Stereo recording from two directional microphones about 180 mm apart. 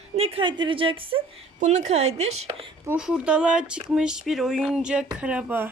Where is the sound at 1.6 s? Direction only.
40° right (ahead or behind).